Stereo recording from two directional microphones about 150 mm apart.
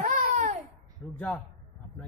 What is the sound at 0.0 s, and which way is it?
Babbling, 60° right (ahead or behind).